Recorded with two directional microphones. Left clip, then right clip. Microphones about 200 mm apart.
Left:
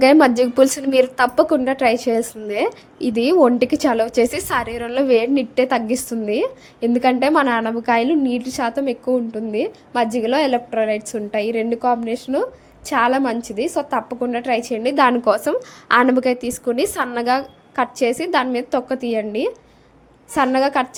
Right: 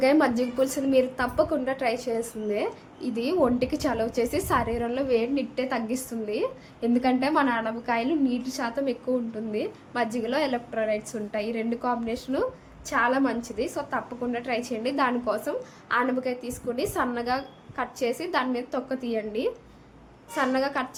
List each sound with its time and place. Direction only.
0.0 s a woman's voice: 45° left (ahead or behind)